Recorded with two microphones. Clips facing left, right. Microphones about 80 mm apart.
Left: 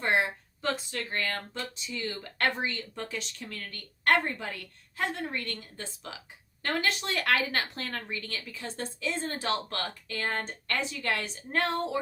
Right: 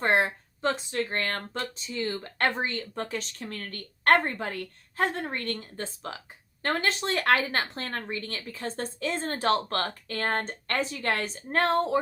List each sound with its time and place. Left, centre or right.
0.0 s a sound: right
0.7 s speech: right
1.1 s speech: right